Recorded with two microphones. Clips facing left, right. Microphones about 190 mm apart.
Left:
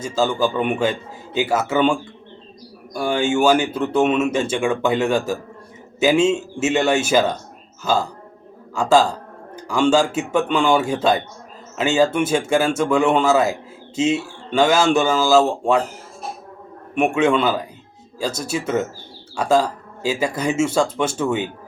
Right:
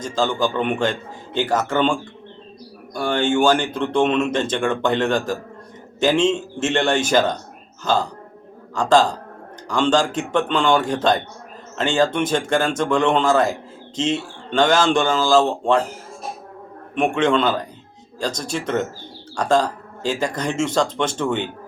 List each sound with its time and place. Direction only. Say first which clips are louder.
0.0 s speech: left 1 dB; 10° left (ahead or behind)
16.9 s speech: left 1 dB; 10° left (ahead or behind)